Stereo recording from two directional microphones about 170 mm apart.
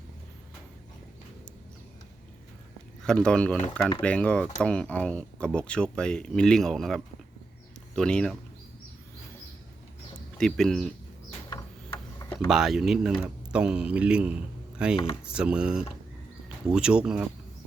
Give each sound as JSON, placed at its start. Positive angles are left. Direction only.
{"t": 3.0, "sound": "speech", "side_deg": 5}
{"t": 10.3, "sound": "speech", "side_deg": 5}
{"t": 12.2, "sound": "a sound", "side_deg": 15}
{"t": 12.5, "sound": "speech", "side_deg": -5}
{"t": 14.9, "sound": "speech", "side_deg": 30}
{"t": 15.2, "sound": "speech", "side_deg": -5}